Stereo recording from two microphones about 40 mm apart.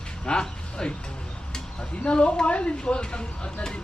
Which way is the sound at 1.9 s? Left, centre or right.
Left.